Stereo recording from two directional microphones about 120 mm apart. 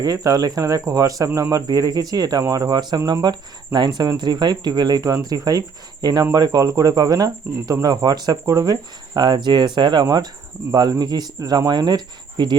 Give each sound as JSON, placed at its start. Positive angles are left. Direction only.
{"t": 0.0, "sound": "speech", "side_deg": -30}